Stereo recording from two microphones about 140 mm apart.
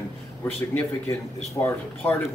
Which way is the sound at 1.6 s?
20° left (ahead or behind).